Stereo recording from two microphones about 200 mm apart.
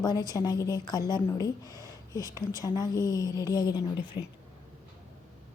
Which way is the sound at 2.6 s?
15° left (ahead or behind).